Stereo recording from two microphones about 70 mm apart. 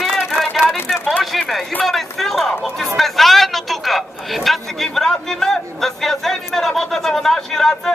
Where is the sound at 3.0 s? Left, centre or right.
Centre.